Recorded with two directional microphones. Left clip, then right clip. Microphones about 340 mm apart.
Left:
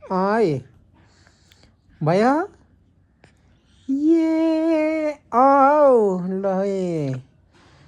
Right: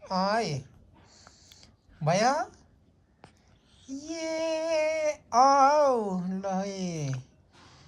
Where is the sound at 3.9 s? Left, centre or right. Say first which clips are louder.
Left 16 dB; centre.